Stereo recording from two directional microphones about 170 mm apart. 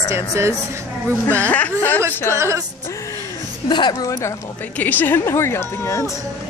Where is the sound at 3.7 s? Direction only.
25° left (ahead or behind).